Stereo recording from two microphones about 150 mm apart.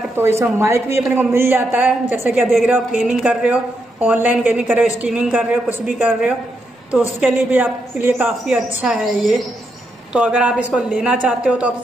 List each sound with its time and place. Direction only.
0.2 s a woman's voice: 20° right (ahead or behind)
7.3 s a woman's voice: 15° right (ahead or behind)